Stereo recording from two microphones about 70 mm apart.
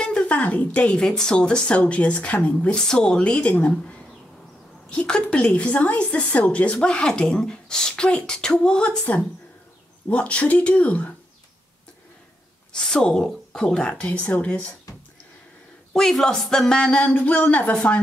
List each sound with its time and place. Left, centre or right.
0.0 s a woman's voice: centre
4.8 s a woman's voice: centre
10.0 s a woman's voice: centre
12.7 s speech: centre
15.9 s speech: centre; by 17.7 s left